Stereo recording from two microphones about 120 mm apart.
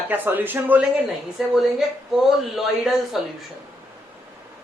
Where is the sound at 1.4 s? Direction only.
5° right (ahead or behind).